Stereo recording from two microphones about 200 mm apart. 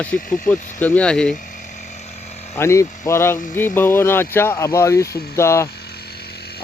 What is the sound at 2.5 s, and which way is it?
Speech, 15° left (ahead or behind).